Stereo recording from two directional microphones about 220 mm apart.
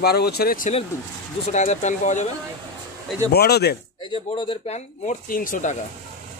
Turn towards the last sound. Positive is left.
turn(degrees=35)  # may be behind; listen again after turning